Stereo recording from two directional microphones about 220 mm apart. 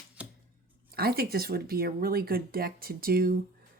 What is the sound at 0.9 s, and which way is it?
Speech, 45° right (ahead or behind).